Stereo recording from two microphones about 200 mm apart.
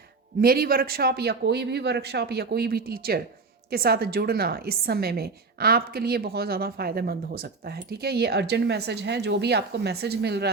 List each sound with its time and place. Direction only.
0.4 s a woman's voice: 50° right (ahead or behind)